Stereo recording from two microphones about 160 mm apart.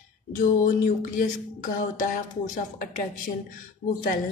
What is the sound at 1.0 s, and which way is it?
Speech, 60° left (ahead or behind).